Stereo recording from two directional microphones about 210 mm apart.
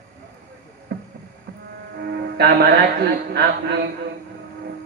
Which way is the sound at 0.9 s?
50° right (ahead or behind).